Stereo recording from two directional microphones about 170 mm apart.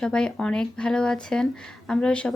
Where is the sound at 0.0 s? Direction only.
5° left (ahead or behind).